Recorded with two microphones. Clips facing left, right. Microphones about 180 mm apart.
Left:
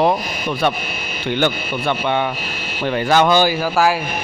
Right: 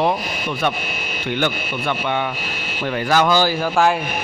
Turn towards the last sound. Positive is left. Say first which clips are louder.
# left 2 dB
turn(degrees=20)  # may be behind; listen again after turning